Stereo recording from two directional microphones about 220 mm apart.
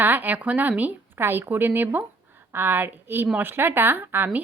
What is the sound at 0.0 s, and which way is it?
Speech, 10° right (ahead or behind).